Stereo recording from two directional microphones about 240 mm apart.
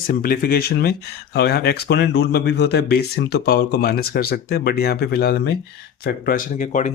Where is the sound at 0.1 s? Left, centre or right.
Left.